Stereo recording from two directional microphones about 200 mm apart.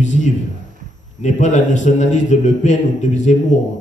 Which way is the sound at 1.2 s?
40° left (ahead or behind).